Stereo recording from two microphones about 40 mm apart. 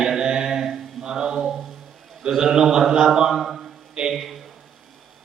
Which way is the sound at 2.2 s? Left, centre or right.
Centre.